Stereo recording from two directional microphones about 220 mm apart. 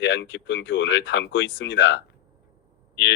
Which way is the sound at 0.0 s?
55° left (ahead or behind).